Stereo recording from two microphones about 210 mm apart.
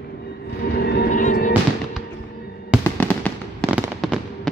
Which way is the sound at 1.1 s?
35° left (ahead or behind).